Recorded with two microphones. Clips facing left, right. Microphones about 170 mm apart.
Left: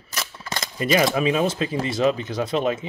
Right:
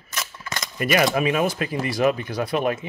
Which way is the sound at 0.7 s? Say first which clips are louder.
Even; 25° left (ahead or behind).